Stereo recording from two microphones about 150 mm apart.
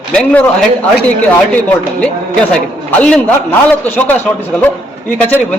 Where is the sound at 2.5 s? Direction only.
5° left (ahead or behind).